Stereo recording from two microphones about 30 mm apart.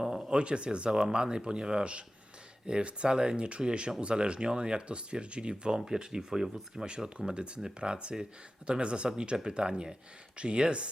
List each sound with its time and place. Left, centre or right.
0.0 s a sound: centre
0.3 s speech: right
0.9 s speech: right
7.3 s speech: right